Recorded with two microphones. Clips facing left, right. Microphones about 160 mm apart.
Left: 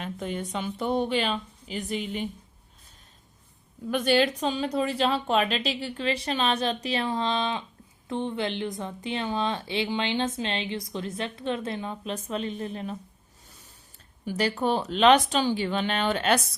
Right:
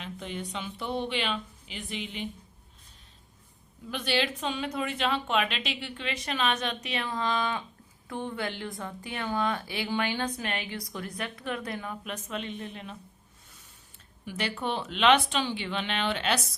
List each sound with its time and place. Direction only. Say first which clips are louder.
0.0 s speech: left 5 dB; 45° left (ahead or behind)
3.9 s a woman's voice: left 7 dB; 45° left (ahead or behind)
14.3 s a woman's voice: left 6 dB; 40° left (ahead or behind)